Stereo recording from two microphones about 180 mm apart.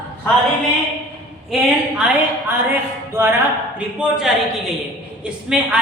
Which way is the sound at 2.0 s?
10° right (ahead or behind).